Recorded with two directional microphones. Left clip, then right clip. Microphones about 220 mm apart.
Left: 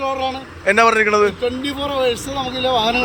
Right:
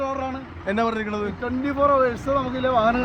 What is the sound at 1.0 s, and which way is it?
Speech, 25° left (ahead or behind).